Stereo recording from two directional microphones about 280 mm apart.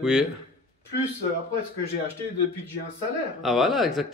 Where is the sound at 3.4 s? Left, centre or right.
Centre.